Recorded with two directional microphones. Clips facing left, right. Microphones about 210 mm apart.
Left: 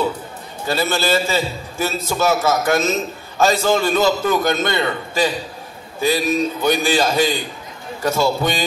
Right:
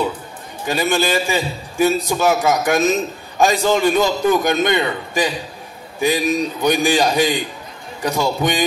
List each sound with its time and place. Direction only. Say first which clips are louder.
0.7 s a man's voice: right 1 dB; 15° right (ahead or behind)